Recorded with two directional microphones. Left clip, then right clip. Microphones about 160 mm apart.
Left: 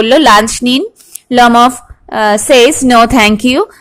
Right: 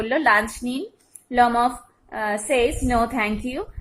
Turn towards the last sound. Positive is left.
turn(degrees=50)  # may be behind; listen again after turning